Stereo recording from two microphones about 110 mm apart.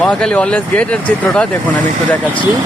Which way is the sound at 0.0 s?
10° left (ahead or behind).